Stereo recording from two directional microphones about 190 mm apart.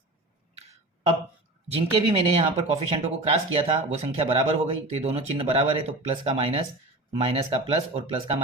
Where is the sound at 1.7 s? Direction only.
30° right (ahead or behind).